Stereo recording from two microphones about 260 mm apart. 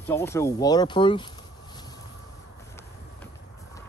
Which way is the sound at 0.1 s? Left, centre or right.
Centre.